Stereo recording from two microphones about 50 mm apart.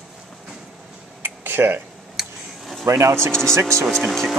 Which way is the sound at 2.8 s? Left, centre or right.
Right.